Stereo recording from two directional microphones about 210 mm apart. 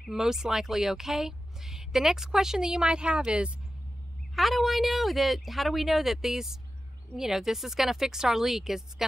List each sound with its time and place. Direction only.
0.0 s speech: centre (ahead or behind)